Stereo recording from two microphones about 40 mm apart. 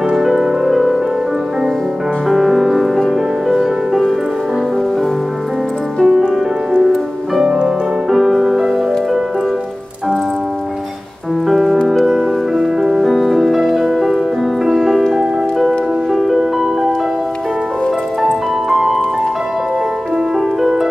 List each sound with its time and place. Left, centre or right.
0.1 s music: centre
2.2 s music: centre
6.0 s music: centre
7.6 s music: centre
11.4 s music: centre
18.2 s music: centre
20.3 s music: centre